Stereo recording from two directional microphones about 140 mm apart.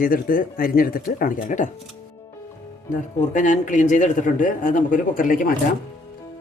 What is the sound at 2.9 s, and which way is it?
Speech, 65° left (ahead or behind).